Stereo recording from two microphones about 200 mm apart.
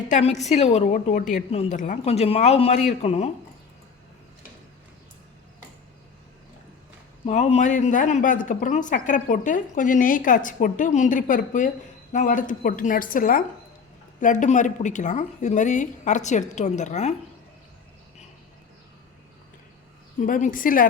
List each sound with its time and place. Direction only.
0.1 s speech: 35° left (ahead or behind)
7.3 s speech: 35° left (ahead or behind)
20.2 s a woman's voice: 40° left (ahead or behind)